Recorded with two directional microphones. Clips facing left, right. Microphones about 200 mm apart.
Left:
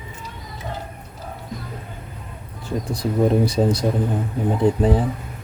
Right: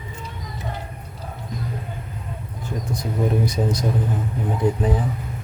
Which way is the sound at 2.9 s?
30° left (ahead or behind).